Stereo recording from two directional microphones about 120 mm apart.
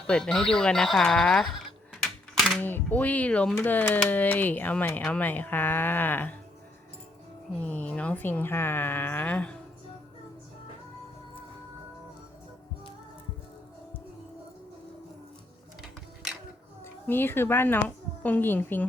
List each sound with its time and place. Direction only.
0.1 s speech: 5° left (ahead or behind)
2.6 s speech: 15° left (ahead or behind)
7.6 s speech: 10° left (ahead or behind)
16.8 s speech: 20° left (ahead or behind)